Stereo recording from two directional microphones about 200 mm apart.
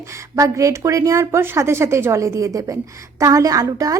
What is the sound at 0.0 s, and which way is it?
Speech, 15° right (ahead or behind).